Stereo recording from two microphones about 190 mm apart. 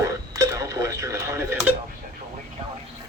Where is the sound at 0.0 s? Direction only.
15° right (ahead or behind).